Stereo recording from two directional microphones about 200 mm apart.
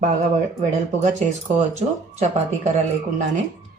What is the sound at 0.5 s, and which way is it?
Speech, 40° right (ahead or behind).